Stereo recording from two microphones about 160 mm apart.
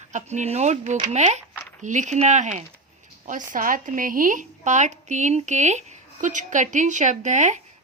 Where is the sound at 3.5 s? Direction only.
55° right (ahead or behind).